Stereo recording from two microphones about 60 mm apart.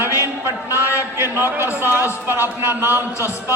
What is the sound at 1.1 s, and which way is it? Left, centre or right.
A man's voice, right.